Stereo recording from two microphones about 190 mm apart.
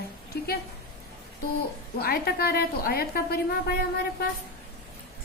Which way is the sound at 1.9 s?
55° left (ahead or behind).